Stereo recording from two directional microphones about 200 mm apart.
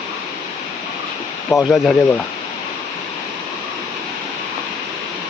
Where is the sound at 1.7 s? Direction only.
Centre (ahead or behind).